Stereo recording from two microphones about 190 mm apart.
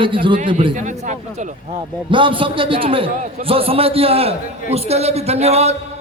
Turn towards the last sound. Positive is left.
turn(degrees=-35)  # may be behind; listen again after turning